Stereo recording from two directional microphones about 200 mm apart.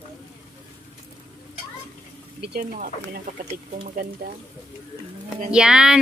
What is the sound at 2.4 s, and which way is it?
Speech, 50° right (ahead or behind).